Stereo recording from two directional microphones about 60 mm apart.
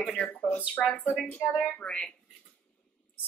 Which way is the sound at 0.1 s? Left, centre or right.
Left.